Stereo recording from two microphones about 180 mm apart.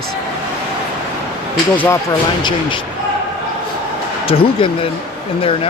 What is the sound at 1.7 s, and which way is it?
Speech, 10° left (ahead or behind).